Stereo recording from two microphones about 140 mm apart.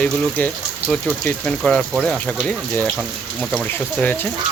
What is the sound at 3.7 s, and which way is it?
Speech, 15° left (ahead or behind).